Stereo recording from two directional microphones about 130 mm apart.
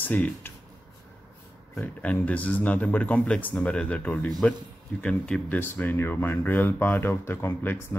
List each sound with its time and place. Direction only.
0.0 s speech: 15° left (ahead or behind)
1.8 s speech: 15° left (ahead or behind)